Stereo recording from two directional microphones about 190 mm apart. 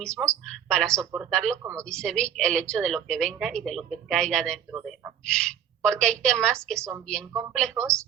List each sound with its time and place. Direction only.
0.0 s speech: 5° left (ahead or behind)